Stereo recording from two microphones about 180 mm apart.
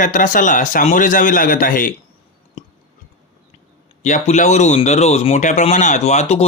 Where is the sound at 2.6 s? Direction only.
45° left (ahead or behind).